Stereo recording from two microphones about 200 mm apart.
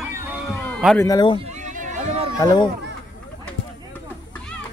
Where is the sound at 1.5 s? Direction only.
40° right (ahead or behind).